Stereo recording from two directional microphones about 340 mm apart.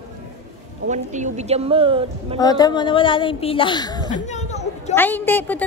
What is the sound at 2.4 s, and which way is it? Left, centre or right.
A woman's voice, centre.